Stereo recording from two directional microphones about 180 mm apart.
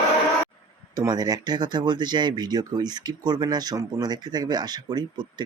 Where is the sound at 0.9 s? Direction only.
20° right (ahead or behind).